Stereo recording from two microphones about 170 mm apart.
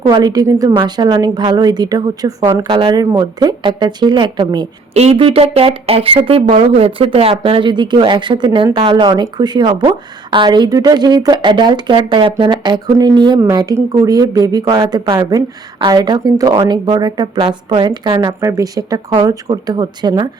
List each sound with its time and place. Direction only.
0.0 s speech: 25° right (ahead or behind)
2.6 s speech: 30° right (ahead or behind)
4.9 s speech: 35° right (ahead or behind)